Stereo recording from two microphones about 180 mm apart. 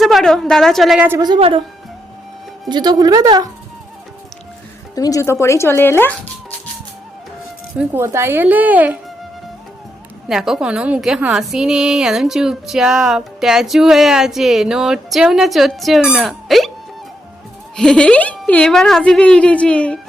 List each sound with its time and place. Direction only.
0.0 s a woman's voice: centre (ahead or behind)
1.2 s speech: 30° right (ahead or behind)
2.6 s speech: 25° right (ahead or behind)
4.9 s speech: 20° left (ahead or behind)
7.8 s speech: 15° right (ahead or behind)
10.2 s a woman's voice: centre (ahead or behind)
17.7 s a woman's voice: 5° left (ahead or behind)